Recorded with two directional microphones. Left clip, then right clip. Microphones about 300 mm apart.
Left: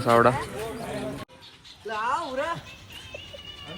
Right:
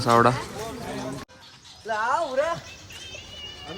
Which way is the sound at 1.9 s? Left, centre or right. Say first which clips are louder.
Right 3 dB; right.